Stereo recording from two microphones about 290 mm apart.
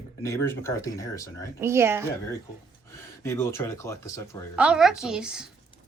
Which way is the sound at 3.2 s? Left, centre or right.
Centre.